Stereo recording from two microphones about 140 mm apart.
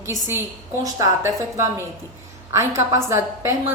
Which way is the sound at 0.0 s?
20° right (ahead or behind).